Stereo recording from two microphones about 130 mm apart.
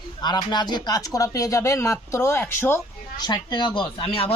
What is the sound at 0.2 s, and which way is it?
Speech, 35° left (ahead or behind).